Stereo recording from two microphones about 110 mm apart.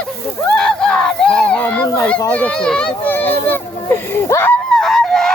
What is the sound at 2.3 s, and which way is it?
Speech, 10° left (ahead or behind).